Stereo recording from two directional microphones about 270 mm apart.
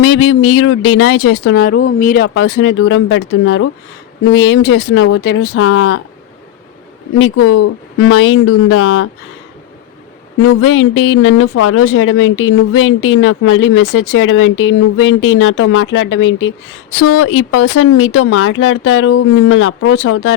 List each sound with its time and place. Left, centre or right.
0.1 s speech: left
7.2 s speech: left
10.4 s speech: left